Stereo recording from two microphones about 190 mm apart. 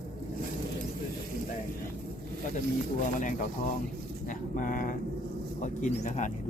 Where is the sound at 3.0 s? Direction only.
45° left (ahead or behind).